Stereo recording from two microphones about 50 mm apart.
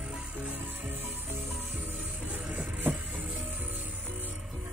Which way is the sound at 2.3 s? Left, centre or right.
Right.